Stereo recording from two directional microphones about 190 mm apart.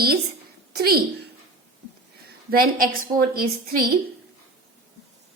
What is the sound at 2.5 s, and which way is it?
A woman's voice, 50° right (ahead or behind).